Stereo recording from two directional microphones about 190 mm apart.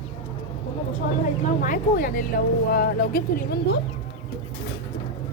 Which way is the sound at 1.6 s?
45° left (ahead or behind).